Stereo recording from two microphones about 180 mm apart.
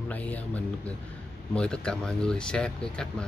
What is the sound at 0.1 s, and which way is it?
Speech, 10° left (ahead or behind).